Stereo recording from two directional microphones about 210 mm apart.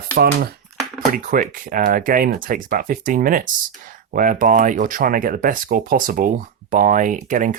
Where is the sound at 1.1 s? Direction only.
40° right (ahead or behind).